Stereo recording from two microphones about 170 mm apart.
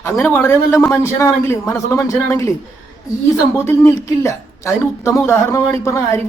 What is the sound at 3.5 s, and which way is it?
Speech, 15° left (ahead or behind).